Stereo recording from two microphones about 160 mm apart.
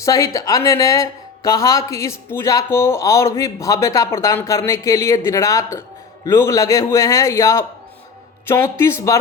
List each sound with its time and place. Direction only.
0.0 s speech: 20° left (ahead or behind)